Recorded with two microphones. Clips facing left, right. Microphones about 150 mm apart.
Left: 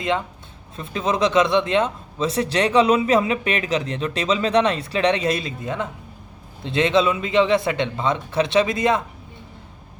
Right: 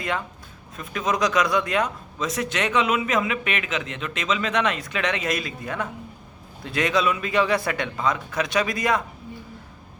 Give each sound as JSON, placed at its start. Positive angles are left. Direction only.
{"t": 0.8, "sound": "speech", "side_deg": 30}